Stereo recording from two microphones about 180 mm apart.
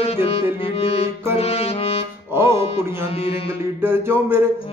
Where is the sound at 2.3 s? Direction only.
15° right (ahead or behind).